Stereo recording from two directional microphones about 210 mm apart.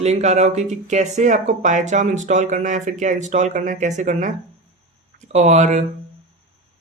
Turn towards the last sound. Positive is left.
turn(degrees=-35)  # may be behind; listen again after turning